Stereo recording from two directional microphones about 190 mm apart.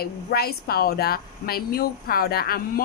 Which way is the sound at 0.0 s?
55° left (ahead or behind).